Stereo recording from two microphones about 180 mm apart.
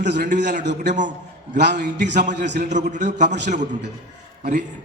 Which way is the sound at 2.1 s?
45° right (ahead or behind).